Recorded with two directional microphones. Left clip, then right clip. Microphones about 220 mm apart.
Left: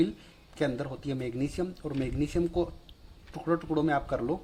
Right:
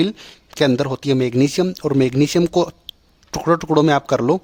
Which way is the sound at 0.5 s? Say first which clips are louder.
Right 14 dB; 40° right (ahead or behind).